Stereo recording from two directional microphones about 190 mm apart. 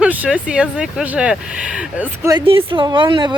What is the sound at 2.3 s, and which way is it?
Speech, 30° right (ahead or behind).